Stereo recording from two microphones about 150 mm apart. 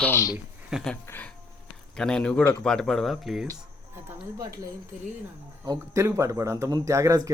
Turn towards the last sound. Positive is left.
turn(degrees=-20)  # may be behind; listen again after turning